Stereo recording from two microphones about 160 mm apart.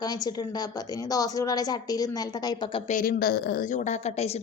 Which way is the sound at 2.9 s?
55° left (ahead or behind).